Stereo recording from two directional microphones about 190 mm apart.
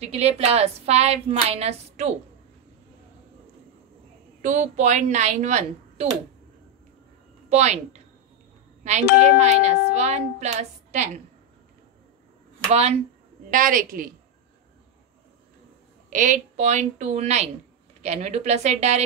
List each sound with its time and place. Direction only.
0.0 s speech: 35° right (ahead or behind)
4.4 s speech: 40° right (ahead or behind)
7.4 s speech: 35° right (ahead or behind)
13.5 s a woman's voice: 45° right (ahead or behind)
16.1 s speech: 40° right (ahead or behind)